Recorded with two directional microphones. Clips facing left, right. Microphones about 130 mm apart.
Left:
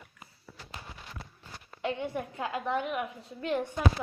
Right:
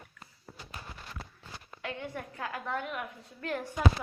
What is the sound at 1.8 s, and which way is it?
A woman's voice, 20° left (ahead or behind).